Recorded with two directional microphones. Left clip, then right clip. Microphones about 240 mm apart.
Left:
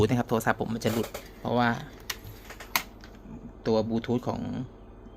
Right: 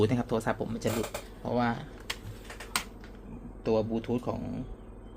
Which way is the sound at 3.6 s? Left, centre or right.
Centre.